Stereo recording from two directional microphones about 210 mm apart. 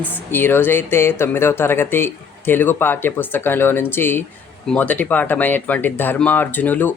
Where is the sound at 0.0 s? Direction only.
10° left (ahead or behind).